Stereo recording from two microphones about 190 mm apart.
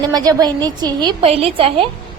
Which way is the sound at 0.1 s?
20° right (ahead or behind).